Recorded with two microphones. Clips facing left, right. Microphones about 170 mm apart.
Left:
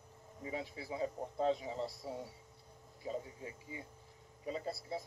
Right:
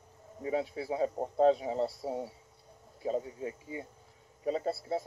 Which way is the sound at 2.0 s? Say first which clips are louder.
Right 8 dB; 30° right (ahead or behind).